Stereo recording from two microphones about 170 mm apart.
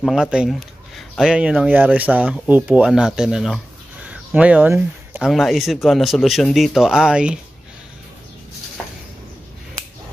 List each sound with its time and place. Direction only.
0.0 s speech: 5° right (ahead or behind)